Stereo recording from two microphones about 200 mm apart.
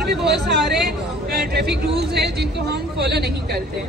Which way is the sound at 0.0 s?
55° right (ahead or behind).